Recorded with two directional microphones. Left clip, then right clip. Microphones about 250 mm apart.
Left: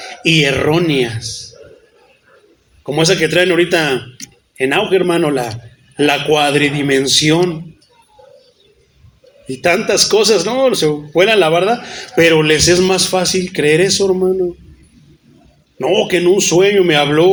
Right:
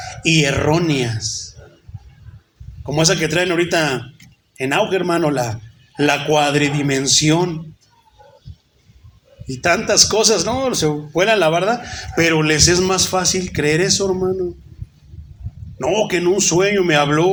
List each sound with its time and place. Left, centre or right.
0.2 s a man's voice: centre
2.8 s a man's voice: centre
9.5 s a man's voice: centre
15.8 s a man's voice: centre